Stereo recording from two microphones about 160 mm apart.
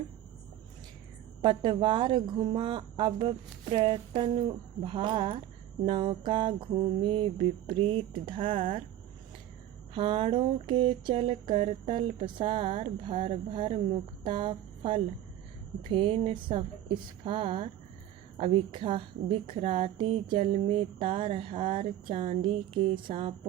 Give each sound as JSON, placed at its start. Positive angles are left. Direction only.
{"t": 1.4, "sound": "a woman's voice", "side_deg": -30}
{"t": 9.9, "sound": "a woman's voice", "side_deg": -35}
{"t": 14.3, "sound": "a sound", "side_deg": -30}
{"t": 15.9, "sound": "a woman's voice", "side_deg": -35}